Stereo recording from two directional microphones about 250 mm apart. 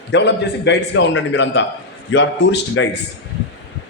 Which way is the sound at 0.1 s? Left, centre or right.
Left.